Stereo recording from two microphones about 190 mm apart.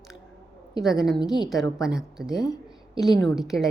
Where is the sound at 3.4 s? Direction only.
Centre (ahead or behind).